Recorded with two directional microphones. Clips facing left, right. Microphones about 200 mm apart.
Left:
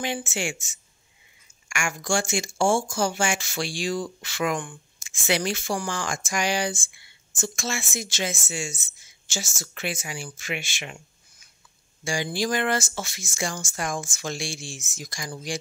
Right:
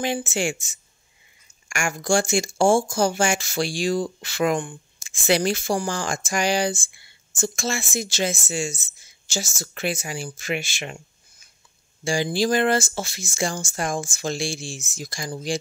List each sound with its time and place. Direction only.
0.0 s a woman's voice: 40° right (ahead or behind)
12.0 s a woman's voice: 30° right (ahead or behind)